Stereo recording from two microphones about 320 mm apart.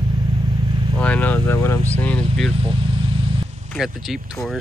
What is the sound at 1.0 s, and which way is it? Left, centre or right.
Speech, centre.